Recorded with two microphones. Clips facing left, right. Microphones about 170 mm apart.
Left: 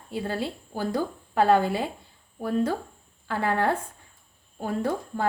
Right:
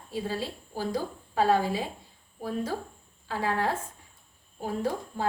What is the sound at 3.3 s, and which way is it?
A woman's voice, 65° left (ahead or behind).